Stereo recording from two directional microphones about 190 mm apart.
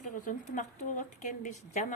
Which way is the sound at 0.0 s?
40° left (ahead or behind).